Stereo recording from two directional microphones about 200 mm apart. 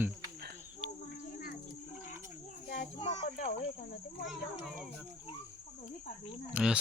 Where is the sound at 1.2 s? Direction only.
45° left (ahead or behind).